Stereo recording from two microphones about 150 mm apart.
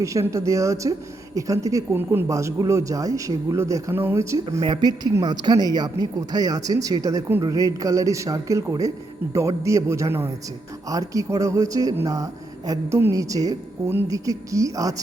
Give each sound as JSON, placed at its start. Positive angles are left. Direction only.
{"t": 0.0, "sound": "speech", "side_deg": -20}